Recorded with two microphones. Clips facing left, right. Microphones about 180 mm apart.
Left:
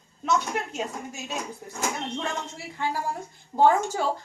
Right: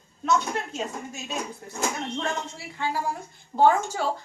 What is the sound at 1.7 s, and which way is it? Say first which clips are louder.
Speech: right 1 dB; 15° left (ahead or behind).